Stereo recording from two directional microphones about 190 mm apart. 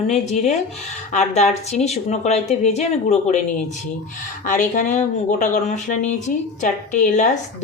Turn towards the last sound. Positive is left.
turn(degrees=40)  # may be behind; listen again after turning